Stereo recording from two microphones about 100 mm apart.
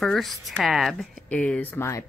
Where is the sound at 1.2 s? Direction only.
15° left (ahead or behind).